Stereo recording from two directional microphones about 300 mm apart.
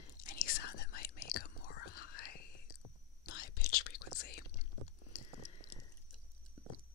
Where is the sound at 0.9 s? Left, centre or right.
Left.